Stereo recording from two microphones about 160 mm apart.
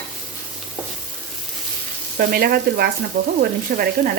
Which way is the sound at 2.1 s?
70° right (ahead or behind).